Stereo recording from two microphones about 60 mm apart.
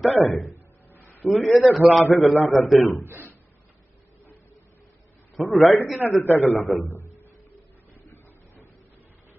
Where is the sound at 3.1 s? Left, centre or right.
Right.